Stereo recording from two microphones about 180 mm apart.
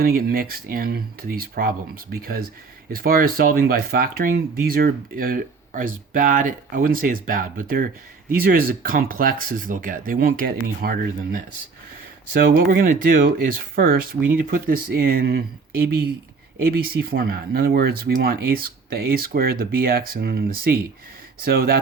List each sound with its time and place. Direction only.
0.0 s speech: 55° right (ahead or behind)